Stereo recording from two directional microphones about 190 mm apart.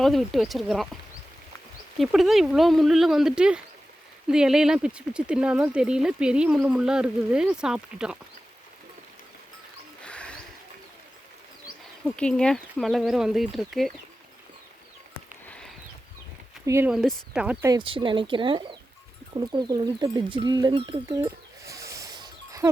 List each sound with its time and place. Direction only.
0.0 s speech: centre (ahead or behind)
2.0 s speech: centre (ahead or behind)
10.0 s a sound: 5° left (ahead or behind)
12.0 s speech: 5° left (ahead or behind)
16.6 s speech: 15° right (ahead or behind)
16.9 s speech: centre (ahead or behind)
17.7 s speech: 25° right (ahead or behind)